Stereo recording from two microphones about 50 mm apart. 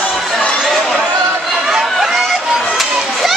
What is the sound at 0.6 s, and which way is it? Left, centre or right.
Chatter, centre.